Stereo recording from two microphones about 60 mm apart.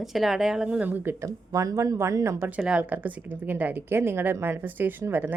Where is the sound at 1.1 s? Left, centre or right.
Right.